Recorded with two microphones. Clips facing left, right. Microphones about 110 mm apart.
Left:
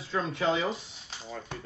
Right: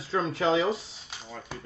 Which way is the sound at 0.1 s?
30° right (ahead or behind).